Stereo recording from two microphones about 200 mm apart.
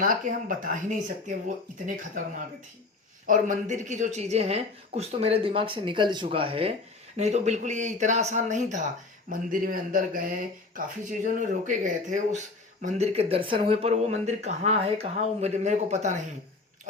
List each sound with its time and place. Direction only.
0.0 s speech: 45° right (ahead or behind)
3.2 s speech: 40° right (ahead or behind)